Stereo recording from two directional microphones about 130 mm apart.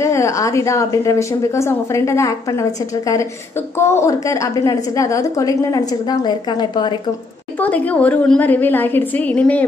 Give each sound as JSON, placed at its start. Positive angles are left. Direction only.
{"t": 0.0, "sound": "a woman's voice", "side_deg": 20}
{"t": 3.7, "sound": "a woman's voice", "side_deg": 20}
{"t": 7.5, "sound": "a woman's voice", "side_deg": 10}